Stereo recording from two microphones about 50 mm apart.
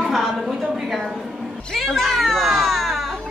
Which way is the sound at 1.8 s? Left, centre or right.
Centre.